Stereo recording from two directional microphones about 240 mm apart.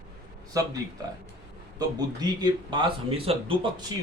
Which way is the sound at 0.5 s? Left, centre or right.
Centre.